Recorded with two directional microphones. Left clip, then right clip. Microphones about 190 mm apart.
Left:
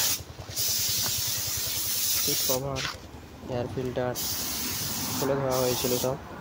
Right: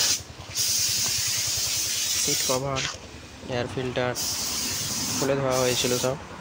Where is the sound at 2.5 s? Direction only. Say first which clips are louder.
Right 3 dB; 10° right (ahead or behind).